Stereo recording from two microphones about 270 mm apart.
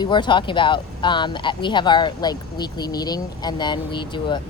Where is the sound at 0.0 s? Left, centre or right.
Centre.